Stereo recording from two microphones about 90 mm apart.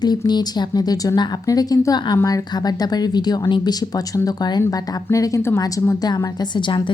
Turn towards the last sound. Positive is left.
turn(degrees=65)  # may be behind; listen again after turning